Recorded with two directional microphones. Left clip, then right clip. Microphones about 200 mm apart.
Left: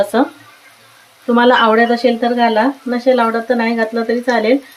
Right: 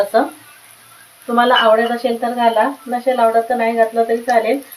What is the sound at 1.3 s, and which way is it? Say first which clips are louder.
Speech: left 1 dB; 35° left (ahead or behind).